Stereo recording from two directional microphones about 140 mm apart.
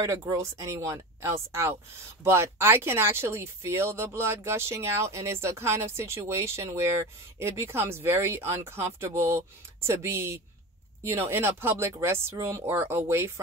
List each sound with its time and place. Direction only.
0.0 s speech: 25° right (ahead or behind)